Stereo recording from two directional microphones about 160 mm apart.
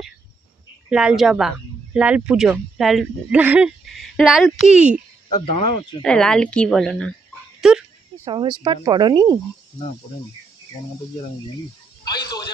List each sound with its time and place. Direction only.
0.8 s speech: 5° right (ahead or behind)
6.0 s speech: 5° left (ahead or behind)
8.3 s speech: 30° right (ahead or behind)
12.0 s a sound: 25° left (ahead or behind)